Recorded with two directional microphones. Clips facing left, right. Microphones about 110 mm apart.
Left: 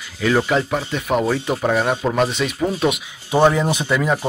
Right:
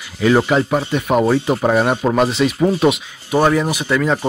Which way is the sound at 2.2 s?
Centre (ahead or behind).